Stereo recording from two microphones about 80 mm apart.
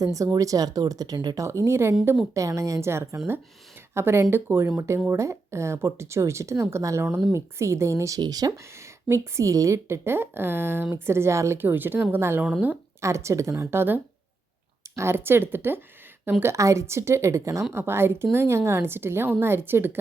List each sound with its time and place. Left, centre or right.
0.0 s speech: right
1.4 s a woman's voice: right
8.2 s speech: right
9.0 s a woman's voice: right
12.5 s speech: centre
13.0 s a woman's voice: right
16.4 s a woman's voice: right